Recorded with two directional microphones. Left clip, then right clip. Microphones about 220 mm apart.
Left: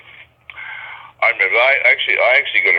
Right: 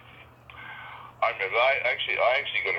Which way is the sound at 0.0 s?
20° left (ahead or behind).